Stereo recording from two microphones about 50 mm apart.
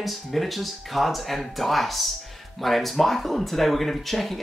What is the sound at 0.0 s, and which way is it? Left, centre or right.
Speech, centre.